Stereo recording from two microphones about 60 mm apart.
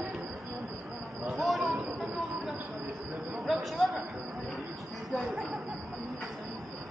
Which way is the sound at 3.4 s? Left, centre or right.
Centre.